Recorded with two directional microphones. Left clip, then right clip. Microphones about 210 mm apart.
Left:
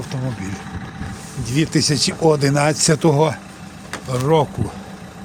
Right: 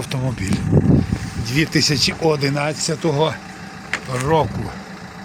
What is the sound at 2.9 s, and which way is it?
Speech, 55° left (ahead or behind).